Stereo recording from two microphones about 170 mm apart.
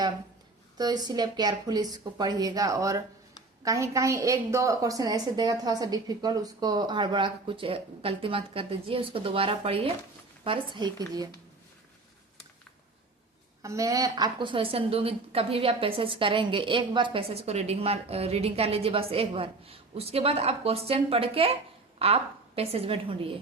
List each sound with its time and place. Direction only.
0.8 s a woman's voice: 25° right (ahead or behind)
13.6 s a woman's voice: 20° right (ahead or behind)